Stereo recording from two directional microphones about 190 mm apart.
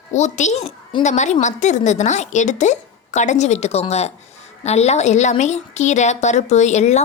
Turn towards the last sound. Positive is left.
turn(degrees=35)  # may be behind; listen again after turning